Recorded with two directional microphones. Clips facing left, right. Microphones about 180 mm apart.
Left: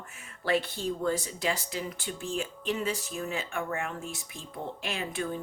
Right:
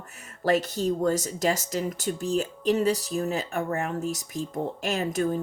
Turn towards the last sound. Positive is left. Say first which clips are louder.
# right 7 dB
turn(degrees=-40)  # may be behind; listen again after turning